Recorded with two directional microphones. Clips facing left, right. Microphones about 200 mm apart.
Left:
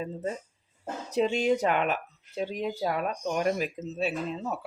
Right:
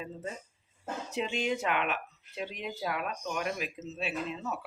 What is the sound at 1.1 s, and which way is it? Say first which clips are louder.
Speech: left 8 dB; 40° left (ahead or behind).